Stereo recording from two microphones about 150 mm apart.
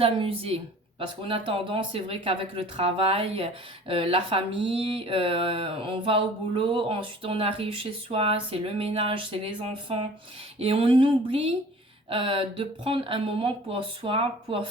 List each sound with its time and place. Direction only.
0.0 s speech: 40° right (ahead or behind)